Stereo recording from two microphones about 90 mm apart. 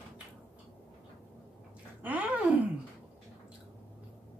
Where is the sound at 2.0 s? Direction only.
15° right (ahead or behind).